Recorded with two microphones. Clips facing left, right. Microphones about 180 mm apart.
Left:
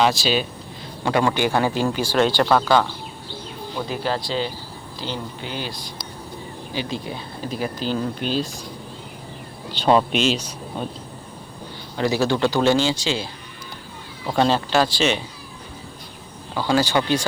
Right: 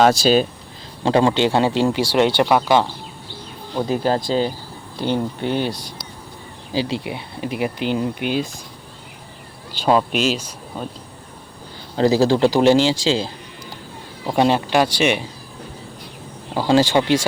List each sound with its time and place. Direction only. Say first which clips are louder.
0.0 s speech: right 5 dB; 45° right (ahead or behind)
1.0 s a man's voice: right 4 dB; 25° right (ahead or behind)
3.8 s a man's voice: right 6 dB; 40° right (ahead or behind)
4.9 s speech: right 9 dB; 55° right (ahead or behind)
6.7 s speech: right 6 dB; 80° right
7.0 s speech: right 3 dB; 20° right (ahead or behind)
9.7 s speech: even; 5° right (ahead or behind)
11.9 s a man's voice: right 5 dB; 35° right (ahead or behind)
13.0 s speech: right 6 dB; 90° right
14.3 s speech: right 2 dB; 15° right (ahead or behind)
16.6 s a man's voice: right 4 dB; 30° right (ahead or behind)